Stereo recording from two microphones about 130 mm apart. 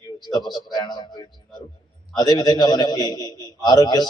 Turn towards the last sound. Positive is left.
turn(degrees=30)  # may be behind; listen again after turning